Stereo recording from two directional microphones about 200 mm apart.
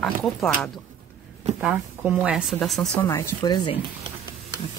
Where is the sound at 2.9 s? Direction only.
15° left (ahead or behind).